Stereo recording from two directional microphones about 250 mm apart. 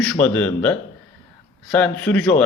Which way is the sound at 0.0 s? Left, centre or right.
Centre.